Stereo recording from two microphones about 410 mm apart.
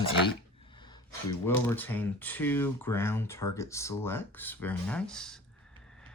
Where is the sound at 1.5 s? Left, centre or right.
Centre.